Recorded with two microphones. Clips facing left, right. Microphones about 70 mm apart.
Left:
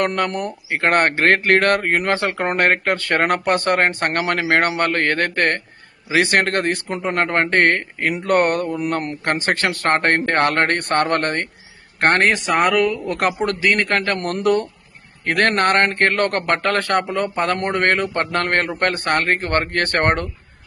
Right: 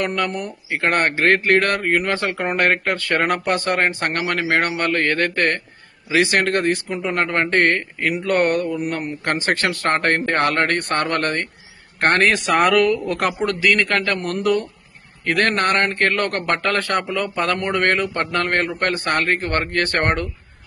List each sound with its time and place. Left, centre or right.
0.0 s a man's voice: left
12.7 s speech: centre
13.1 s a man's voice: left
14.3 s a man's voice: left